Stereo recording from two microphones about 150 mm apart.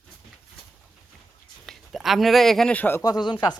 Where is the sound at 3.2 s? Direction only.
30° left (ahead or behind).